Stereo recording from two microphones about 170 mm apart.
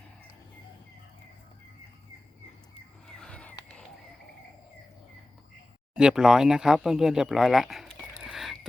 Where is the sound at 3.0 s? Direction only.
5° left (ahead or behind).